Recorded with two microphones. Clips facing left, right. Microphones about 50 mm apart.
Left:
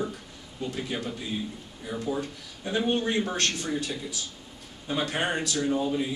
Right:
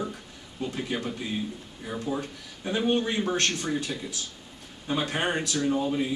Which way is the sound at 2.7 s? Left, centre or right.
Centre.